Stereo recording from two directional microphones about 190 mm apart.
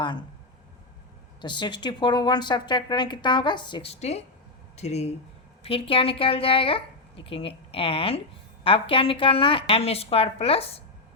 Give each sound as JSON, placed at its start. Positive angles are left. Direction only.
{"t": 0.0, "sound": "speech", "side_deg": 25}
{"t": 1.4, "sound": "speech", "side_deg": 25}